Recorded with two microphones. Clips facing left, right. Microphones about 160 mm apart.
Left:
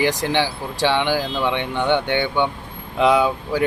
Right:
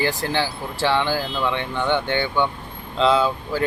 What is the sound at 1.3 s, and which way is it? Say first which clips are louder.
Speech: left 2 dB; 20° left (ahead or behind).